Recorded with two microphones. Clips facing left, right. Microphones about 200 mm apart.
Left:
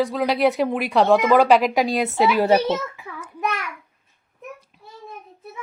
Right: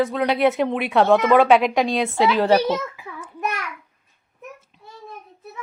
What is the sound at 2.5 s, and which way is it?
Speech, 25° left (ahead or behind).